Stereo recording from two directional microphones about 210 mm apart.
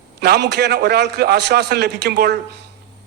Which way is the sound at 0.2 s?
50° right (ahead or behind).